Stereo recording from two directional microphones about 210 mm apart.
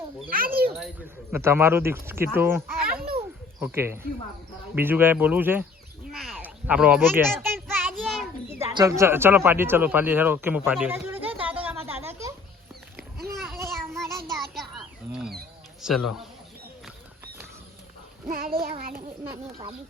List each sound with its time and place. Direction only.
0.3 s a child's voice: 45° right (ahead or behind)
1.3 s speech: 10° right (ahead or behind)
6.1 s a sound: centre (ahead or behind)
7.4 s child singing: 10° right (ahead or behind)
8.4 s speech: 15° right (ahead or behind)
13.3 s a sound: centre (ahead or behind)
15.8 s speech: centre (ahead or behind)
18.3 s child singing: 45° right (ahead or behind)
18.8 s a sound: 45° right (ahead or behind)